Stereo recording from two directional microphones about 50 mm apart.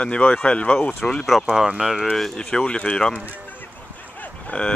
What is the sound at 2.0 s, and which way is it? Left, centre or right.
Speech, centre.